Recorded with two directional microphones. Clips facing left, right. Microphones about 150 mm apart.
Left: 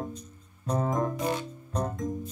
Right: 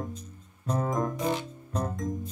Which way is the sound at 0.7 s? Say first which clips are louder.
Left 1 dB; 25° left (ahead or behind).